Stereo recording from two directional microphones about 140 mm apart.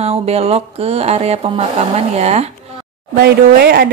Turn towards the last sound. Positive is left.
turn(degrees=-90)